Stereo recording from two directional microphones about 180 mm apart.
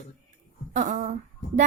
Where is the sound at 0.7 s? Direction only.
45° right (ahead or behind).